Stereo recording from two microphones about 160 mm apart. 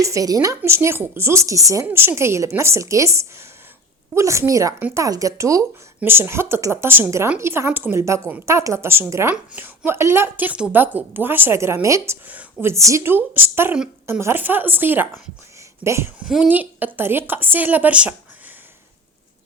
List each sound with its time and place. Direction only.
0.0 s a woman's voice: 20° right (ahead or behind)
16.2 s speech: 5° right (ahead or behind)